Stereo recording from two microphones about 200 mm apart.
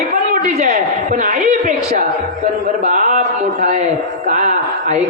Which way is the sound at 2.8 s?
40° right (ahead or behind).